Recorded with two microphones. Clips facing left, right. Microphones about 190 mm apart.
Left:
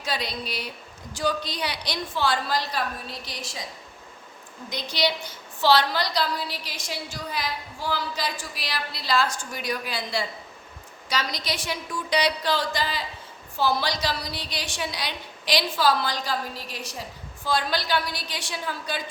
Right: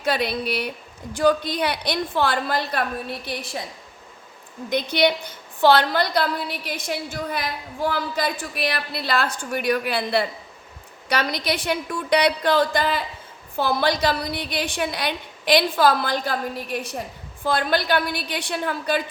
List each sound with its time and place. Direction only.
0.0 s a woman's voice: 55° right (ahead or behind)
4.7 s a woman's voice: 55° right (ahead or behind)